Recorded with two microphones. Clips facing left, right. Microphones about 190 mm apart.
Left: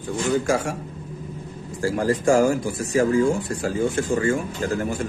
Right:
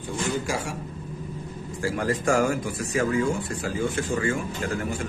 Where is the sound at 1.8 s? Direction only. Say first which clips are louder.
Left 5 dB; 35° left (ahead or behind).